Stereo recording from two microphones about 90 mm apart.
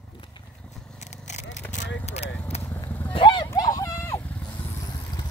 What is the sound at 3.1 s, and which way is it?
Clip-clop, 70° left (ahead or behind).